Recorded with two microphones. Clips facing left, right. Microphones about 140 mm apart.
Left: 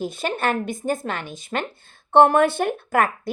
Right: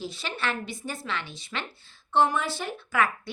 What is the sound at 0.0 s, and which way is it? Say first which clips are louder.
A woman's voice: left 8 dB; 50° left (ahead or behind).